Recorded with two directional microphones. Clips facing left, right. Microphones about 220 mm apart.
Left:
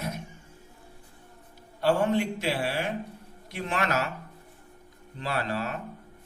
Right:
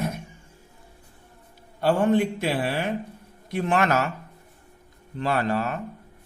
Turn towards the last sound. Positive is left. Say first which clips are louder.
# right 6 dB
turn(degrees=-50)  # may be behind; listen again after turning